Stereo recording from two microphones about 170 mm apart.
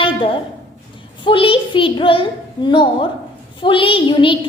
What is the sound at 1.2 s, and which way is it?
A child's voice, 30° left (ahead or behind).